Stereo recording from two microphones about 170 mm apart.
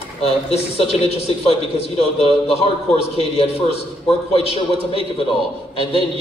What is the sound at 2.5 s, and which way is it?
A man's voice, 35° left (ahead or behind).